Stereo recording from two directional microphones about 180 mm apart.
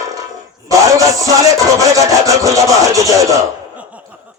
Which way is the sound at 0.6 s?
20° right (ahead or behind).